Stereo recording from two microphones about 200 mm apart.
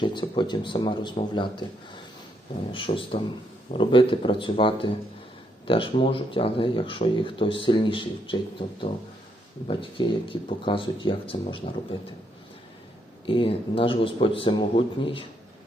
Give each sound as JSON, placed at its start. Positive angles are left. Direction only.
{"t": 0.0, "sound": "speech", "side_deg": 25}
{"t": 2.7, "sound": "speech", "side_deg": 25}
{"t": 13.2, "sound": "speech", "side_deg": 25}